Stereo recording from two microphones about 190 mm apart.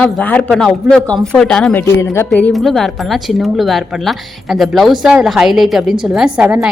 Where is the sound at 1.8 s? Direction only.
15° left (ahead or behind).